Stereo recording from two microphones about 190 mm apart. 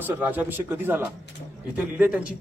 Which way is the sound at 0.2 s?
10° right (ahead or behind).